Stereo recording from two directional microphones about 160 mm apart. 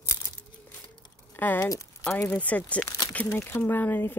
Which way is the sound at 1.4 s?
15° left (ahead or behind).